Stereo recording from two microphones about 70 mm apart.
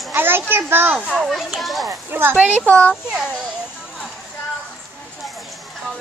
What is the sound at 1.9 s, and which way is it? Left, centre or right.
Speech, right.